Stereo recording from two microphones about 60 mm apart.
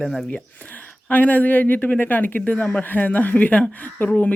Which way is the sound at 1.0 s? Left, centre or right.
Left.